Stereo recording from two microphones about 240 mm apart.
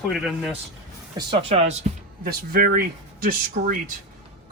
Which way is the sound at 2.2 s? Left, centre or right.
Right.